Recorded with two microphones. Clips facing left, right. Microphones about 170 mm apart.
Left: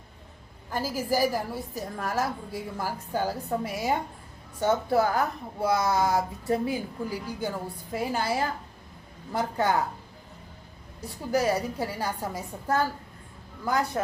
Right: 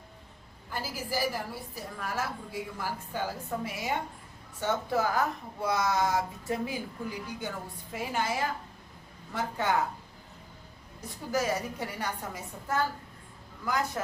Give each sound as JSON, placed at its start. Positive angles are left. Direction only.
{"t": 0.7, "sound": "a woman's voice", "side_deg": 45}
{"t": 11.0, "sound": "a woman's voice", "side_deg": 35}